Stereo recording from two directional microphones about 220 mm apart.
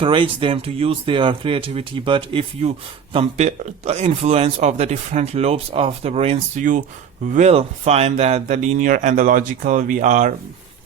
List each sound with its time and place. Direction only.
0.0 s speech: 20° right (ahead or behind)